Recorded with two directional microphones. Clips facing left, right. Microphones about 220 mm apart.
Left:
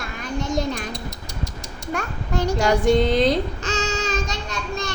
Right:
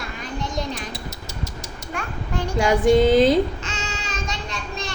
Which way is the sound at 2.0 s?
40° left (ahead or behind).